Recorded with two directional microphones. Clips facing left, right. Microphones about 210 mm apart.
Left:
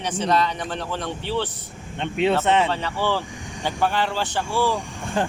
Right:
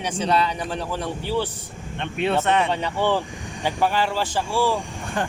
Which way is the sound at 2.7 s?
15° right (ahead or behind).